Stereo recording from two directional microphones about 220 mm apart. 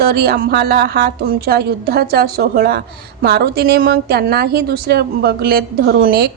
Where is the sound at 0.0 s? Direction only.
45° right (ahead or behind).